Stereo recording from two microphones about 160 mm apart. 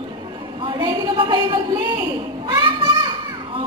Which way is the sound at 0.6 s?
30° right (ahead or behind).